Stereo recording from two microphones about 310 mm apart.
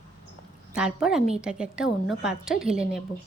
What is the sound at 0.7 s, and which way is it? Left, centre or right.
A woman's voice, centre.